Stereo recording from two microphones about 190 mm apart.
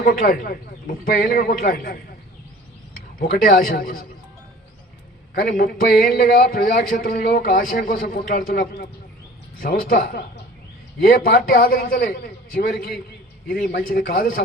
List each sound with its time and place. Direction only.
0.0 s speech: 50° left (ahead or behind)
3.2 s speech: 45° left (ahead or behind)
5.3 s speech: 50° left (ahead or behind)